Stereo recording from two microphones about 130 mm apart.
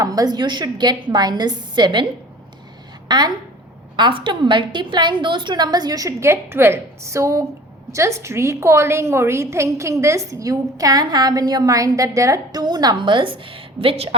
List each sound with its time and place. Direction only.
0.0 s a woman's voice: 30° right (ahead or behind)
3.1 s a woman's voice: 35° right (ahead or behind)